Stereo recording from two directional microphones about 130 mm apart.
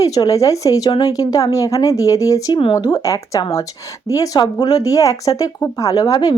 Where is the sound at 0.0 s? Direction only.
25° left (ahead or behind).